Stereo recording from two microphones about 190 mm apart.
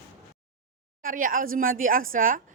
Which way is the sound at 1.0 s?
45° right (ahead or behind).